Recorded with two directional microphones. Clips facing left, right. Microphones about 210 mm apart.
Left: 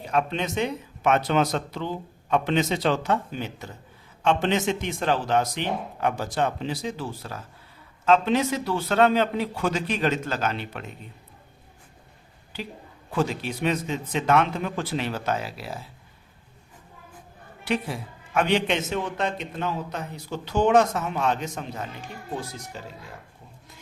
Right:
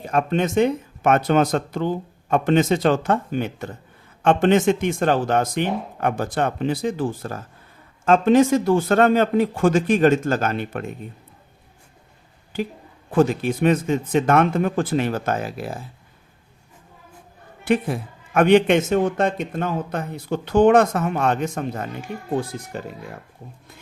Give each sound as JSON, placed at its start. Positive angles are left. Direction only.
{"t": 0.0, "sound": "a man's voice", "side_deg": -50}
{"t": 13.1, "sound": "a man's voice", "side_deg": -50}
{"t": 17.7, "sound": "a man's voice", "side_deg": -50}